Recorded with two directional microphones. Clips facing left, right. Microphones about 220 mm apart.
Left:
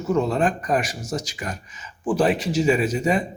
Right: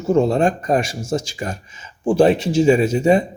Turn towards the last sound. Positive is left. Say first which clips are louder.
# right 6 dB
turn(degrees=-25)  # may be behind; listen again after turning